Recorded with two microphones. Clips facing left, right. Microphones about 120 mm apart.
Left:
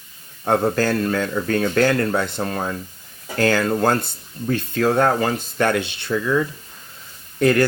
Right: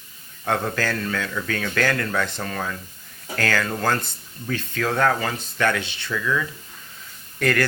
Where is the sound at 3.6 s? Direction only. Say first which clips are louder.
Left 5 dB; 35° left (ahead or behind).